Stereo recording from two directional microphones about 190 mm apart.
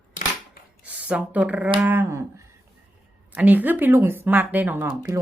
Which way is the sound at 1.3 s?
10° right (ahead or behind).